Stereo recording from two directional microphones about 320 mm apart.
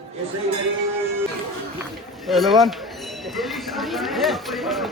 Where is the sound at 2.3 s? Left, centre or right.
Centre.